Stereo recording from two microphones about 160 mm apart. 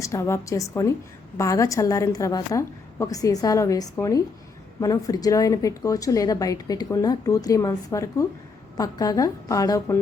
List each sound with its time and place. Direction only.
0.0 s a woman's voice: 20° left (ahead or behind)